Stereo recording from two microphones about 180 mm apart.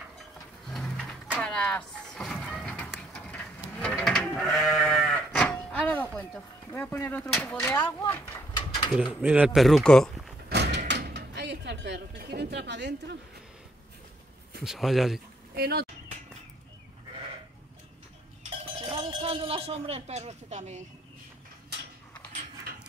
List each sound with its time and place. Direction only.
0.7 s a sound: centre (ahead or behind)
7.5 s speech: 15° left (ahead or behind)
8.5 s a sound: 25° left (ahead or behind)
8.9 s speech: 5° right (ahead or behind)
10.5 s door: 70° right (ahead or behind)
10.9 s a sound: 70° right (ahead or behind)
14.6 s speech: centre (ahead or behind)
15.5 s speech: 60° right (ahead or behind)
18.8 s cowbell: 30° right (ahead or behind)
19.2 s speech: 30° right (ahead or behind)